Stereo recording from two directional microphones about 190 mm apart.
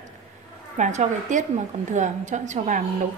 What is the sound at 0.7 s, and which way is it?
A woman's voice, 40° right (ahead or behind).